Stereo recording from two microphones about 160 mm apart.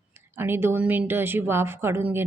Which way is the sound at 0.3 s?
15° right (ahead or behind).